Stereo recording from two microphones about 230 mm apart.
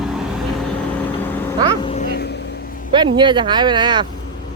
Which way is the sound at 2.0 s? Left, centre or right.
Left.